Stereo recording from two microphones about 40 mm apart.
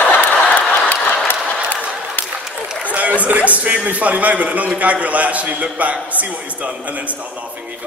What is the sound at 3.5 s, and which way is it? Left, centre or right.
A man's voice, right.